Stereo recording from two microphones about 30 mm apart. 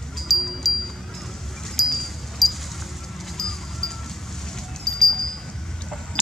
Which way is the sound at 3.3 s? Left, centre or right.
Centre.